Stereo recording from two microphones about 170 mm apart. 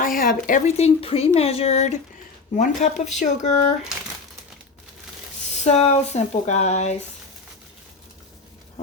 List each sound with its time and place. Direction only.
0.0 s speech: 55° left (ahead or behind)
5.6 s speech: 40° left (ahead or behind)